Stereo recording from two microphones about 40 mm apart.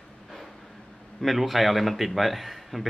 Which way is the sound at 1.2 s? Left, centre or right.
Centre.